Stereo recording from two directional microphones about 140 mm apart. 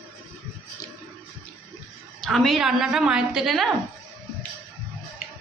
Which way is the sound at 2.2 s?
5° left (ahead or behind).